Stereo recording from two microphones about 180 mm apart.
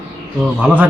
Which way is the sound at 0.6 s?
10° right (ahead or behind).